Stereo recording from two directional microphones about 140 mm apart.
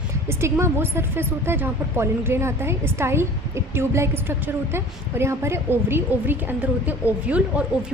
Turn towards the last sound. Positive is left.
turn(degrees=-10)  # may be behind; listen again after turning